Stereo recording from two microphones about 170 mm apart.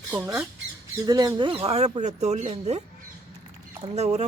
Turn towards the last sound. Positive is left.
turn(degrees=-40)  # may be behind; listen again after turning